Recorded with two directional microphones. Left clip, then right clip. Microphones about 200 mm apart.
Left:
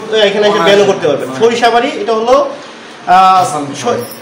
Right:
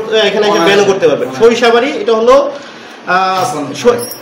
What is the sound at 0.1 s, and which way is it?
Speech, 15° left (ahead or behind).